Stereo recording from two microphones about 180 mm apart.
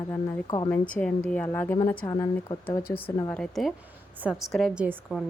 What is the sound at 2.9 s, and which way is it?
Speech, 30° left (ahead or behind).